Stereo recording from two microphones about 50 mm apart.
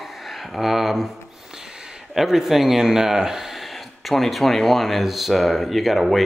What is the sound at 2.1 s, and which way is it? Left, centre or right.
Speech, centre.